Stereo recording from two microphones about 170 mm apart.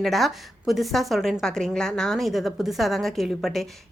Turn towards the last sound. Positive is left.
turn(degrees=0)  # may be behind; listen again after turning